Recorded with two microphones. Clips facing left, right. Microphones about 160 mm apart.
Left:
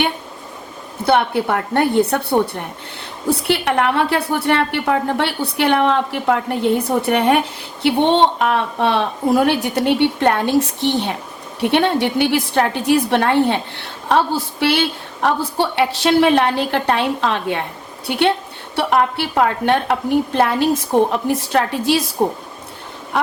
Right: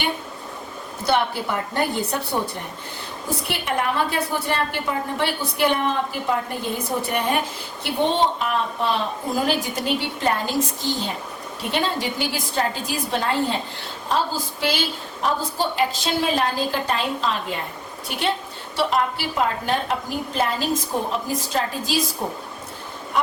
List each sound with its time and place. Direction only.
1.0 s a woman's voice: 60° left (ahead or behind)